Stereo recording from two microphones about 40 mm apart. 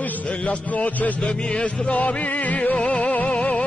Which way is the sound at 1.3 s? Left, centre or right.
Left.